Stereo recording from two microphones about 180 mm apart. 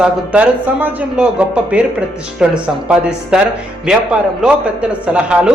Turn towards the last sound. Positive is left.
turn(degrees=-5)  # may be behind; listen again after turning